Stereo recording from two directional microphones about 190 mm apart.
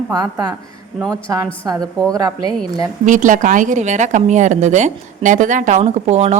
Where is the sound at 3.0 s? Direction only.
40° right (ahead or behind).